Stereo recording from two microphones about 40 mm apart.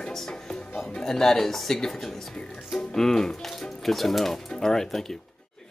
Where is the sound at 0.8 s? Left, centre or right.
Centre.